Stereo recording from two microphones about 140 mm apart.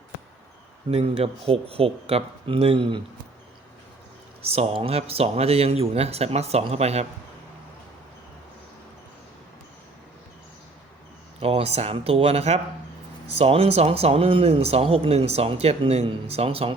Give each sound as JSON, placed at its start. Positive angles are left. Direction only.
{"t": 0.9, "sound": "speech", "side_deg": -45}
{"t": 4.4, "sound": "speech", "side_deg": -45}
{"t": 11.3, "sound": "speech", "side_deg": -45}